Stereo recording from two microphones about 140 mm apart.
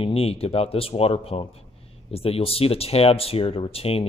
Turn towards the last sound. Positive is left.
turn(degrees=45)  # may be behind; listen again after turning